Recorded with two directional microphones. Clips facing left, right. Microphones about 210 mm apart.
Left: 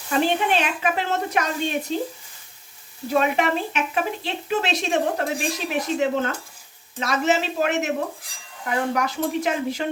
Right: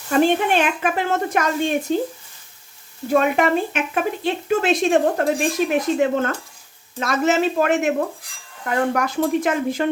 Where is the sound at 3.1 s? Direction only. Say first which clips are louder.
Right 4 dB; 50° right (ahead or behind).